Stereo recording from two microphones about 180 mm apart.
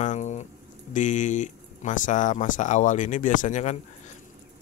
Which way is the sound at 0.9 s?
45° left (ahead or behind).